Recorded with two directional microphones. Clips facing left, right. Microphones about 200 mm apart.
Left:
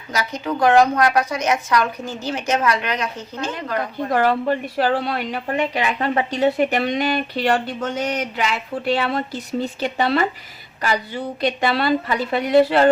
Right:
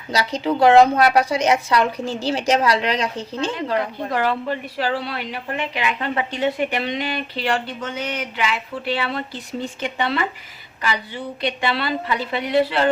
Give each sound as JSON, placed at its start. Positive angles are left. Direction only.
{"t": 0.1, "sound": "a woman's voice", "side_deg": -30}
{"t": 4.1, "sound": "a woman's voice", "side_deg": 45}